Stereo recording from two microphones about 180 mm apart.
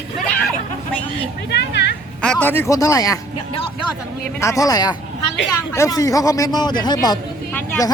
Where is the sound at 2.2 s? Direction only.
5° left (ahead or behind); by 7.2 s 20° left (ahead or behind).